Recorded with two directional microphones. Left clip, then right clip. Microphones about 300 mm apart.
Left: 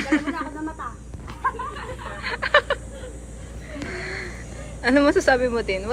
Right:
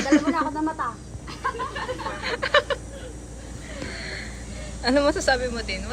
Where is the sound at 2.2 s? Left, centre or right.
Centre.